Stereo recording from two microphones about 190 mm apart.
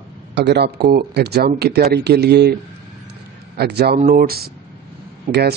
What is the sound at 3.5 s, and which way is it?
Speech, 55° right (ahead or behind).